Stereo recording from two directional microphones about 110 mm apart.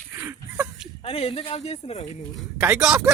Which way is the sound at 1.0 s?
65° left (ahead or behind).